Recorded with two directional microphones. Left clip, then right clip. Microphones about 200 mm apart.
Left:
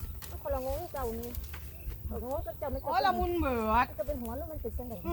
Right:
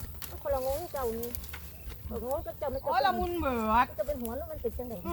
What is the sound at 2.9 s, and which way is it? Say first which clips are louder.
Speech: even; 5° left (ahead or behind).